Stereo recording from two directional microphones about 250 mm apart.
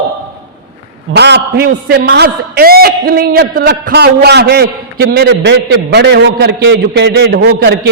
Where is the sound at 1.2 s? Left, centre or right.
Right.